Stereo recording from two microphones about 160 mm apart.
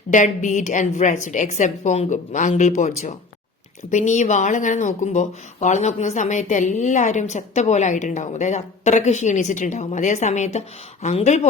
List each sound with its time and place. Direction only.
0.1 s speech: 50° left (ahead or behind)